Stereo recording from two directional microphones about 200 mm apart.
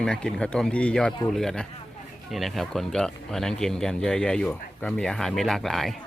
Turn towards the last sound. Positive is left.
turn(degrees=0)  # may be behind; listen again after turning